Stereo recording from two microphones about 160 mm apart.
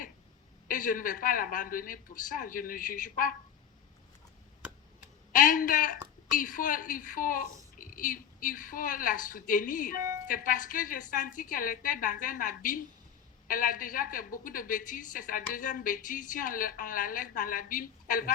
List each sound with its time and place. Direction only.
0.7 s a woman's voice: 60° left (ahead or behind)
5.3 s a woman's voice: 60° left (ahead or behind)